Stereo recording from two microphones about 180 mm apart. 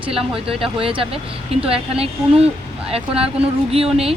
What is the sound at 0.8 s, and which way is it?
Speech, 30° right (ahead or behind).